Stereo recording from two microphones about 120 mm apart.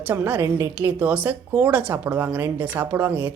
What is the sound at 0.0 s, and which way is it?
A woman's voice, 15° right (ahead or behind).